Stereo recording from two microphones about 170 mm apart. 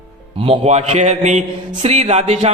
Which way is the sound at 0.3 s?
30° right (ahead or behind).